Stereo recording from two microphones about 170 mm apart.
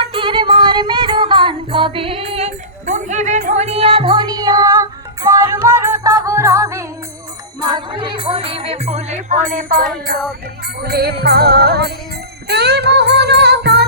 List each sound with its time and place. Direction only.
0.0 s music: 30° right (ahead or behind); by 9.9 s 55° right (ahead or behind)
10.8 s music: 70° right (ahead or behind)